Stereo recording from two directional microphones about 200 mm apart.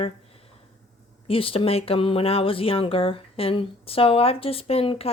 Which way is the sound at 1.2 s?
25° left (ahead or behind).